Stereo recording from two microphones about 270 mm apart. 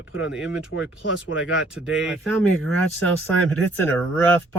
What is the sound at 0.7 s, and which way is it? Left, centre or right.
Speech, left.